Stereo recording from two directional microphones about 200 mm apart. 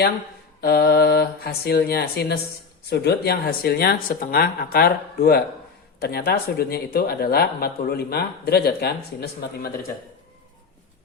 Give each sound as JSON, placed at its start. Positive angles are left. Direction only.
{"t": 0.6, "sound": "speech", "side_deg": 50}